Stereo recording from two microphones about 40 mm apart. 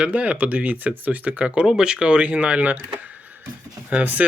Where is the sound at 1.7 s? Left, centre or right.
Centre; by 2.8 s right.